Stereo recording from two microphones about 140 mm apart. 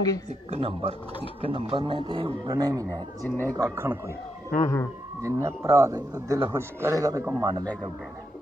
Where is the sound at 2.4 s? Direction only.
25° right (ahead or behind).